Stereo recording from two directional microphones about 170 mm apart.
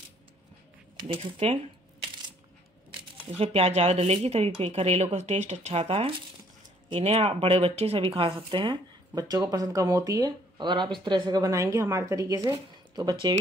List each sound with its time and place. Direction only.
0.9 s speech: 35° right (ahead or behind)
3.3 s speech: 35° right (ahead or behind)